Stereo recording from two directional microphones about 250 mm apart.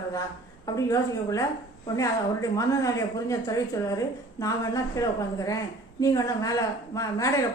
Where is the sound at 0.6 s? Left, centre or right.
Centre.